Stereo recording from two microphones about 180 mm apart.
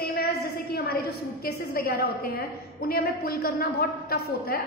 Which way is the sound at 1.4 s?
60° left (ahead or behind).